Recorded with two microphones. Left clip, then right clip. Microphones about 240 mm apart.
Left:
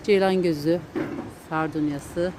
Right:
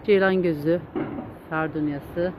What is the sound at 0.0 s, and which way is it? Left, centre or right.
Speech, centre.